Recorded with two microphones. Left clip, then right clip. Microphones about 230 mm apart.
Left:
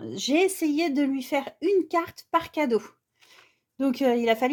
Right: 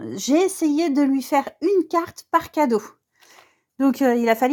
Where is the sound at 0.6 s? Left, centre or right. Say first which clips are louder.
Right 5 dB; right.